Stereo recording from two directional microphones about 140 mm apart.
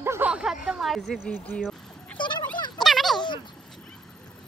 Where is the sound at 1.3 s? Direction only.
10° left (ahead or behind).